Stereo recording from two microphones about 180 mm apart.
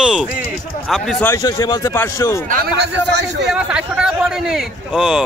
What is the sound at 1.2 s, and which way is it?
A man's voice, 20° left (ahead or behind).